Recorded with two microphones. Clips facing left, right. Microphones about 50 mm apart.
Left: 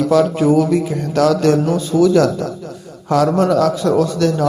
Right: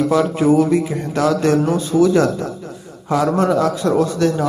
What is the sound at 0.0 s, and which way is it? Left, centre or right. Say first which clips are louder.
Speech: left 2 dB; right.